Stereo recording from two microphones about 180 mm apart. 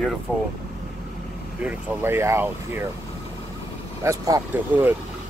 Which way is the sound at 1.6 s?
10° right (ahead or behind).